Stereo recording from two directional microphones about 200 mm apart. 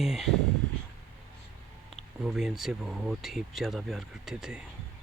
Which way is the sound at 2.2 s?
Centre (ahead or behind).